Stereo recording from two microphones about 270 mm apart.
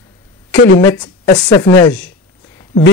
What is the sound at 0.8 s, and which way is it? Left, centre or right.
Speech, centre.